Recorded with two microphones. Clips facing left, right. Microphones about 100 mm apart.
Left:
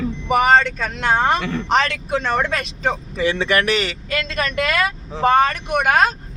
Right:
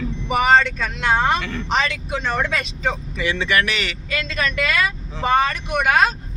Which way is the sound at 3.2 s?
40° left (ahead or behind).